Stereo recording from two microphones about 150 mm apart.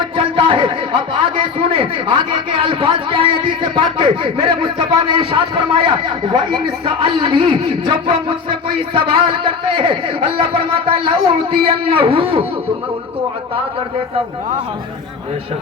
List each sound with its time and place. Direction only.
0.2 s a man's voice: 35° right (ahead or behind)